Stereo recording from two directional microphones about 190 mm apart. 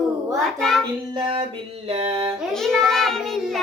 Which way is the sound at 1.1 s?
30° right (ahead or behind).